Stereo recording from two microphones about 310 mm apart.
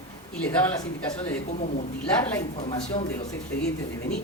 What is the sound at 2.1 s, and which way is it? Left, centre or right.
Speech, centre.